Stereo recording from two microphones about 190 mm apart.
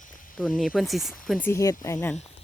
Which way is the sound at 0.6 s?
Centre (ahead or behind).